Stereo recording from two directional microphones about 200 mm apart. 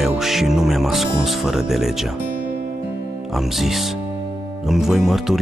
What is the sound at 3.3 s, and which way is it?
Speech, centre (ahead or behind).